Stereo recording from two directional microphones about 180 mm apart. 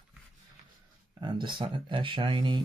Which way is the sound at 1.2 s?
25° right (ahead or behind).